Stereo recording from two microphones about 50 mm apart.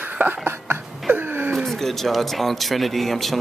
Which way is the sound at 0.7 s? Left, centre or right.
Right.